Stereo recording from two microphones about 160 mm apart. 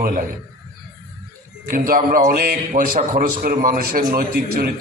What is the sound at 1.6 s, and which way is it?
Speech, 65° right (ahead or behind).